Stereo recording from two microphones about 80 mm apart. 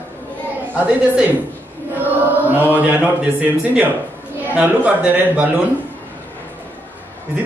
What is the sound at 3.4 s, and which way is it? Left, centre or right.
A man's voice, right.